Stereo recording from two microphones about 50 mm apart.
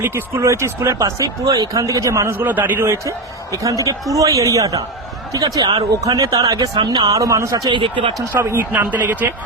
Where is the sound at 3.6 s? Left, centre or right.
Right.